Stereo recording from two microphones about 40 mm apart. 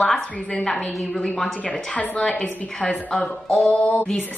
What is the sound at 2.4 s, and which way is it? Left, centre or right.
A woman's voice, centre.